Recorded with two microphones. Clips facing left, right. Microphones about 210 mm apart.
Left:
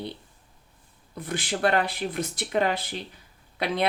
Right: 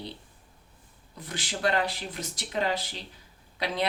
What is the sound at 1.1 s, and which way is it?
Speech, 55° left (ahead or behind).